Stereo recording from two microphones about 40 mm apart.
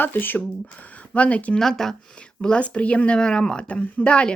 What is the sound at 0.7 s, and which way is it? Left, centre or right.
Speech, left.